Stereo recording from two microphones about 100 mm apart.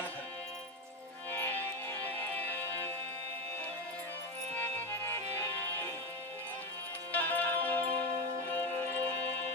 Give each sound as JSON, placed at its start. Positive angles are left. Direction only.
{"t": 1.3, "sound": "music", "side_deg": 20}
{"t": 4.5, "sound": "music", "side_deg": 20}
{"t": 7.1, "sound": "music", "side_deg": 15}